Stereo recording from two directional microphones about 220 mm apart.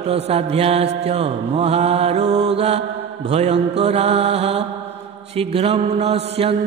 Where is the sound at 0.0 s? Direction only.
30° right (ahead or behind).